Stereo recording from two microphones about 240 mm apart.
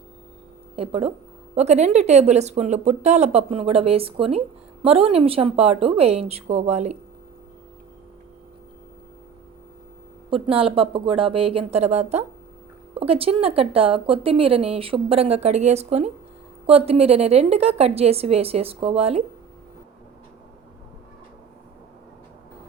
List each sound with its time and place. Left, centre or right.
0.8 s speech: right
10.2 s speech: right